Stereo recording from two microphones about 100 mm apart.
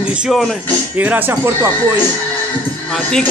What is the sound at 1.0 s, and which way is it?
Speech, 20° right (ahead or behind).